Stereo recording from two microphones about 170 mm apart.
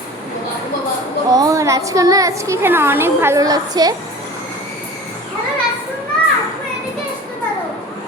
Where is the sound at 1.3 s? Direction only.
20° right (ahead or behind).